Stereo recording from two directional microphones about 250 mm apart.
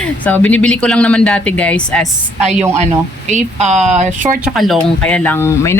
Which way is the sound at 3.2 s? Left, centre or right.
Right.